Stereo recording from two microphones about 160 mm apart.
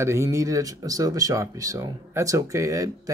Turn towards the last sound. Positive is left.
turn(degrees=-20)  # may be behind; listen again after turning